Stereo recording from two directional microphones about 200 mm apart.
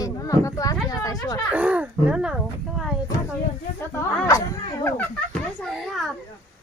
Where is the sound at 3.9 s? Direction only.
15° left (ahead or behind).